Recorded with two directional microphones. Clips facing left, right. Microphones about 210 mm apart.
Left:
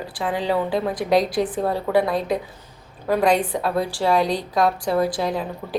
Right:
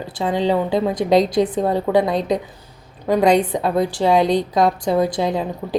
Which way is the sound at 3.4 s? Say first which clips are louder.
Right 4 dB; 20° right (ahead or behind).